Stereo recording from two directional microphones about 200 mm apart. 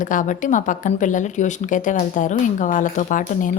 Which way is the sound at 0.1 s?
40° left (ahead or behind).